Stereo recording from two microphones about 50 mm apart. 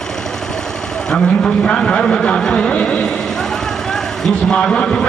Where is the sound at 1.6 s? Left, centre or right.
Centre.